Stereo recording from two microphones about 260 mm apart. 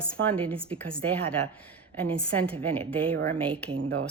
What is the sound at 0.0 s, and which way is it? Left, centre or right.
Speech, centre.